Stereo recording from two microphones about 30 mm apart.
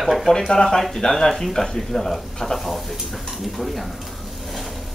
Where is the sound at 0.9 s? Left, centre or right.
Centre.